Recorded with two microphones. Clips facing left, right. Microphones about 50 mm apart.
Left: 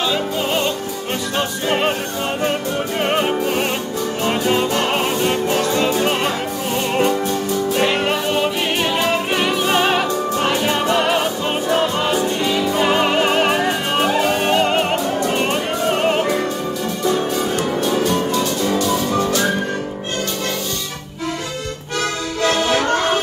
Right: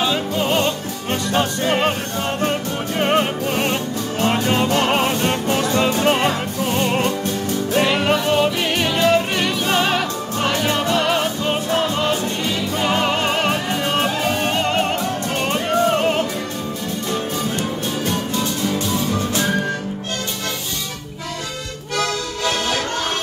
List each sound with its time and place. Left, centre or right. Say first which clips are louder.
0.1 s music: even; centre
7.8 s music: even; centre
22.4 s music: left 6 dB; left